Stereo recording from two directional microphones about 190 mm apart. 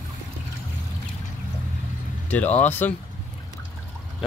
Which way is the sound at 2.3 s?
10° left (ahead or behind).